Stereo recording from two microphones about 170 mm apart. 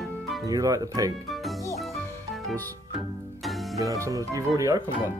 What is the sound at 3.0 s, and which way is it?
Music, centre (ahead or behind).